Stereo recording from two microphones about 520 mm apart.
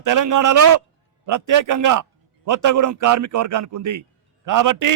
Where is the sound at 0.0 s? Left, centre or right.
Right.